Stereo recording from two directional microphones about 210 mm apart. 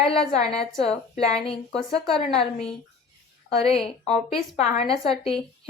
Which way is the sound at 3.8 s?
Centre (ahead or behind).